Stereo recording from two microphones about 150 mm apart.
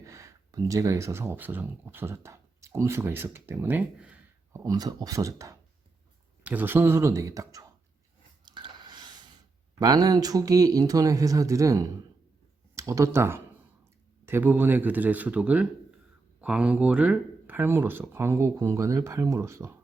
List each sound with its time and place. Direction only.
0.0 s speech: 20° right (ahead or behind)
4.6 s speech: 25° right (ahead or behind)
6.4 s speech: 10° right (ahead or behind)
8.4 s a sound: 30° right (ahead or behind)
9.8 s speech: 25° right (ahead or behind)